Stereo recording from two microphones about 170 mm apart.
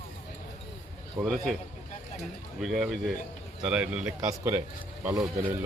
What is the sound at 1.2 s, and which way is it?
Speech, centre (ahead or behind).